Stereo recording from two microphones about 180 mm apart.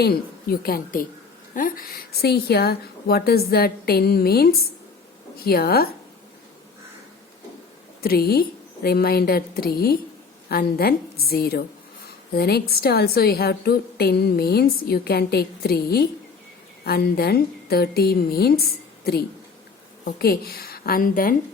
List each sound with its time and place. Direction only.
0.0 s a woman's voice: 55° left (ahead or behind)
8.0 s a woman's voice: 60° left (ahead or behind)